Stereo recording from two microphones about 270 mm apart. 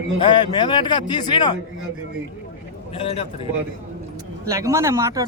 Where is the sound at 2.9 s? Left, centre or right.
Left.